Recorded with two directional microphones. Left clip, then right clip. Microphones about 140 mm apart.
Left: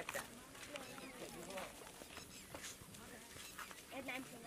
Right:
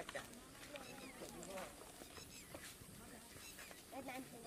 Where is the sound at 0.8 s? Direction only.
Centre (ahead or behind).